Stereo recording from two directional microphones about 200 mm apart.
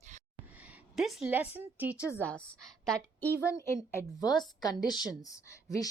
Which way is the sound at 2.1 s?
5° left (ahead or behind).